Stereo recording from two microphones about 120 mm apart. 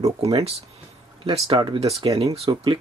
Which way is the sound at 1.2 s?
50° right (ahead or behind).